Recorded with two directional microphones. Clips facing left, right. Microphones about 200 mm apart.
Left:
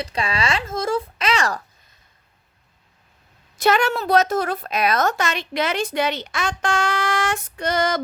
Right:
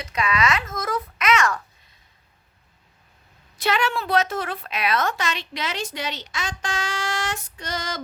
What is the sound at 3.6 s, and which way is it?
A woman's voice, 45° left (ahead or behind).